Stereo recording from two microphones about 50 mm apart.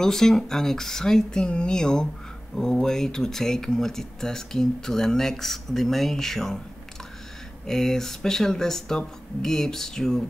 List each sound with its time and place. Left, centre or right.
0.0 s speech: centre
7.6 s speech: centre